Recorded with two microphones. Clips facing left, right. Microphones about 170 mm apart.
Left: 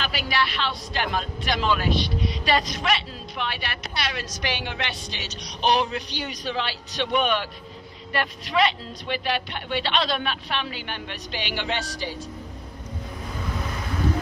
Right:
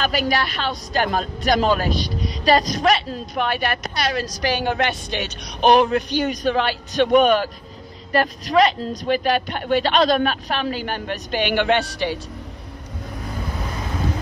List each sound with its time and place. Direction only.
0.0 s speech: 45° right (ahead or behind); by 12.2 s 65° right (ahead or behind)